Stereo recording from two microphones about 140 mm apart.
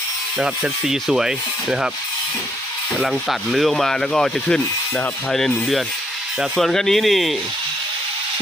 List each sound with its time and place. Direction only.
0.3 s speech: 5° right (ahead or behind)
3.0 s speech: centre (ahead or behind)